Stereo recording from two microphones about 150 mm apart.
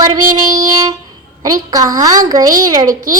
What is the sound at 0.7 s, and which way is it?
A child's voice, 25° right (ahead or behind).